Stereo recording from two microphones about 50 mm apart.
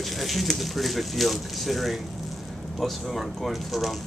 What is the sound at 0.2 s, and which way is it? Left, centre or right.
Speech, centre.